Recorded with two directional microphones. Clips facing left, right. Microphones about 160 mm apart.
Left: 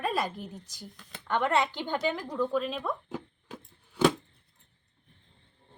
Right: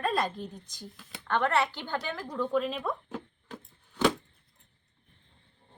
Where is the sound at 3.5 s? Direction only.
10° left (ahead or behind).